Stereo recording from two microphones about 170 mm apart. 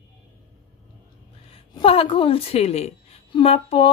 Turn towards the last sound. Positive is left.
turn(degrees=35)  # may be behind; listen again after turning